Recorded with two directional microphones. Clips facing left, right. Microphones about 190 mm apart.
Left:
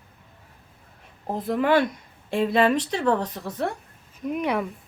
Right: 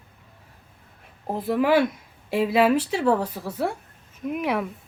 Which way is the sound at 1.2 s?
5° right (ahead or behind).